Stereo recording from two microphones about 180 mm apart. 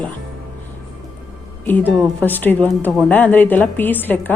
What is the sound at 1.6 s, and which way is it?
A woman's voice, 10° left (ahead or behind).